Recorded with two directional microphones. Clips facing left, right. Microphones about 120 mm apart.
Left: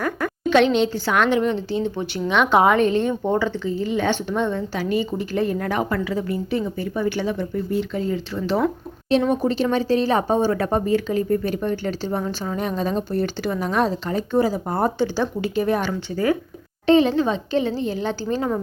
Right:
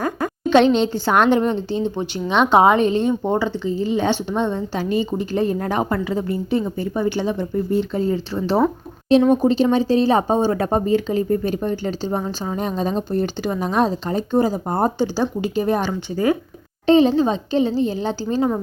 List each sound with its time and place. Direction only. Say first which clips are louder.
0.0 s a woman's voice: right 1 dB; 25° right (ahead or behind)
1.8 s speech: right 1 dB; 20° right (ahead or behind)
9.4 s speech: right 4 dB; 20° right (ahead or behind)
17.5 s a woman's voice: right 3 dB; 15° right (ahead or behind)